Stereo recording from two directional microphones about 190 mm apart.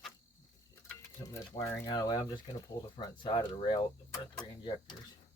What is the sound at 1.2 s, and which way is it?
Speech, 15° left (ahead or behind).